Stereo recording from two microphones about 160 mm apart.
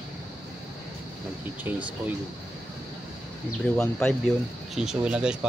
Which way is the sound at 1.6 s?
10° right (ahead or behind).